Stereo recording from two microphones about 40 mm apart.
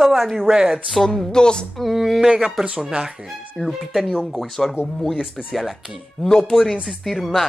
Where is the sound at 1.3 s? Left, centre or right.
Left.